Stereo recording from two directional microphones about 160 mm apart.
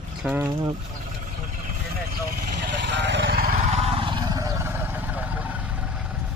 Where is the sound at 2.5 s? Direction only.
90° right; by 3.5 s 70° right (ahead or behind).